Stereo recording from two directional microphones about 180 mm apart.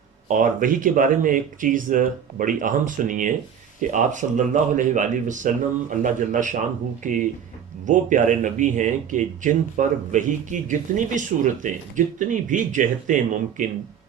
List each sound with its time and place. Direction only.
0.3 s speech: 45° right (ahead or behind)